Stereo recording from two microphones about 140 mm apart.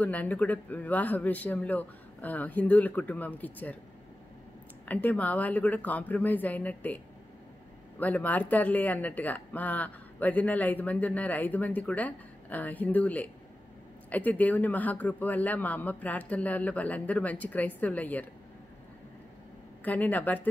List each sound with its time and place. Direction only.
0.0 s speech: 10° left (ahead or behind)
4.8 s speech: 10° left (ahead or behind)
8.0 s speech: 10° left (ahead or behind)
19.8 s speech: 10° left (ahead or behind)